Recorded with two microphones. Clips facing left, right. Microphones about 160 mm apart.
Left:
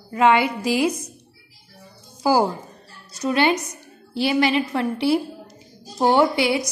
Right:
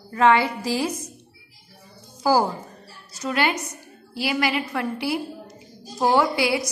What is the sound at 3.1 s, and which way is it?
A woman's voice, 20° left (ahead or behind).